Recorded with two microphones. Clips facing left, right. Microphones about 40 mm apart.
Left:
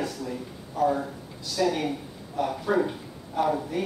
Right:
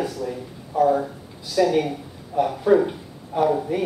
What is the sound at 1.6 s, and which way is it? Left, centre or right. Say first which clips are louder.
Speech: right 6 dB; centre.